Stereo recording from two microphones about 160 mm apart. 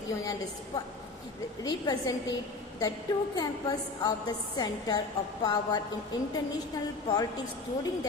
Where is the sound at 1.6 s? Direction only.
25° left (ahead or behind).